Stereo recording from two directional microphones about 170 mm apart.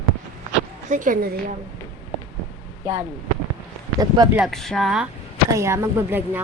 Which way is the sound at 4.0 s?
20° right (ahead or behind).